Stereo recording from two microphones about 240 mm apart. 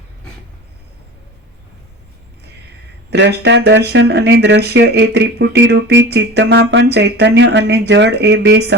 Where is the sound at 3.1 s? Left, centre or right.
Right.